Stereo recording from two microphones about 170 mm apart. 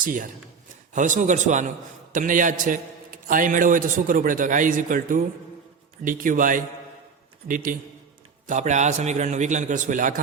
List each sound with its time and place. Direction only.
0.0 s a man's voice: 50° right (ahead or behind)